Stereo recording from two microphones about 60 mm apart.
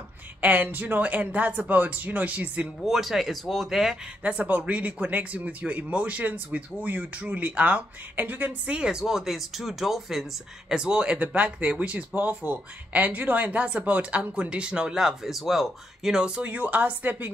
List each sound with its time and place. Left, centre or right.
0.4 s speech: right
2.8 s speech: centre
4.2 s speech: right; by 10.2 s centre
10.7 s speech: centre
16.4 s speech: right